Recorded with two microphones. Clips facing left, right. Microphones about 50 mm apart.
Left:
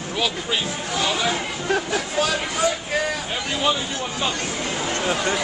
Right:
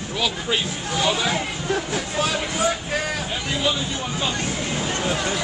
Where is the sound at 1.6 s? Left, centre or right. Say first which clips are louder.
Left 4 dB; left.